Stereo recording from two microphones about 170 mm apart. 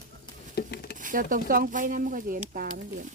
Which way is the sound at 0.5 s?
70° left (ahead or behind).